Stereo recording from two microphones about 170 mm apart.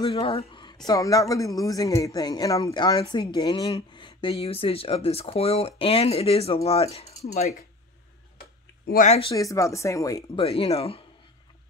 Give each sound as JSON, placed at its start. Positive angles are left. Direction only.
{"t": 0.1, "sound": "speech", "side_deg": 35}
{"t": 0.8, "sound": "a man's voice", "side_deg": 20}
{"t": 9.0, "sound": "a man's voice", "side_deg": 40}
{"t": 9.3, "sound": "speech", "side_deg": 20}
{"t": 10.4, "sound": "a man's voice", "side_deg": 35}